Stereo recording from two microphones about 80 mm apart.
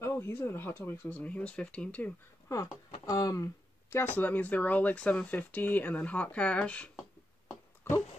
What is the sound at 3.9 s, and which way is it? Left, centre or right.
Speech, left.